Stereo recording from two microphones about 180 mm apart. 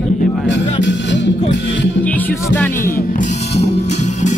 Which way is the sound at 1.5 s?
80° left.